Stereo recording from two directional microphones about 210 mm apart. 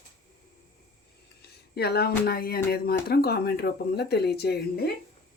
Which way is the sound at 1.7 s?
50° left (ahead or behind).